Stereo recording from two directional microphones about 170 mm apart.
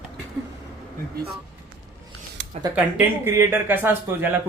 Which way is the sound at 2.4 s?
90° right.